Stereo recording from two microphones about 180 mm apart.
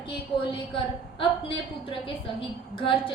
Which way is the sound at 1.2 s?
30° left (ahead or behind).